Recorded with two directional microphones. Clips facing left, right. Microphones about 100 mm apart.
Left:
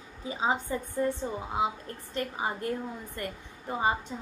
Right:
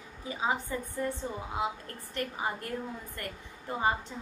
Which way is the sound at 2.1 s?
20° left (ahead or behind).